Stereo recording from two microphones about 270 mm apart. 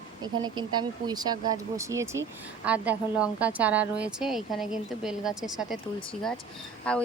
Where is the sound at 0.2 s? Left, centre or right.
Centre.